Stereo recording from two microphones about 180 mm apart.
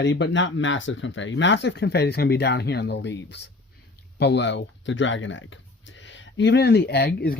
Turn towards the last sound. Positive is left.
turn(degrees=60)  # may be behind; listen again after turning